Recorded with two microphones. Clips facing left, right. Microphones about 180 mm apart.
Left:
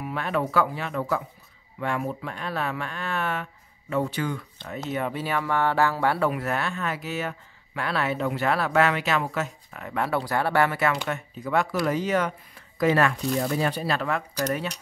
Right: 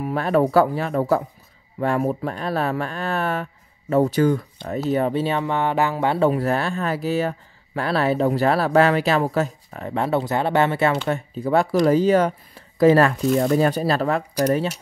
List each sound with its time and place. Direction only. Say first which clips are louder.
0.0 s speech: right 8 dB; 40° right (ahead or behind)